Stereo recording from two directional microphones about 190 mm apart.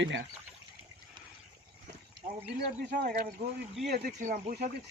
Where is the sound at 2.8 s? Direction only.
50° right (ahead or behind).